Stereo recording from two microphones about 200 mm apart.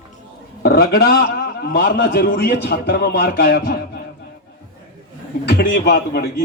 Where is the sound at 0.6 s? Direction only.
50° left (ahead or behind).